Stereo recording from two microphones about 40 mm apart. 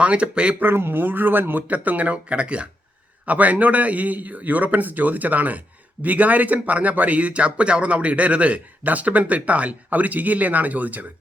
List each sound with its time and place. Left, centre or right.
0.0 s speech: right
0.6 s speech: right
1.7 s a man's voice: right
3.2 s a man's voice: right